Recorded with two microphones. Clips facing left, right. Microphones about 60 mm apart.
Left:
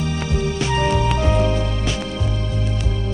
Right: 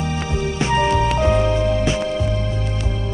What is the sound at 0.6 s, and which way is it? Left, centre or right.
Music, right.